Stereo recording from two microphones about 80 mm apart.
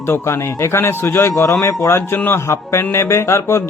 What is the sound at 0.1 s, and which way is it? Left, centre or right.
A man's voice, left.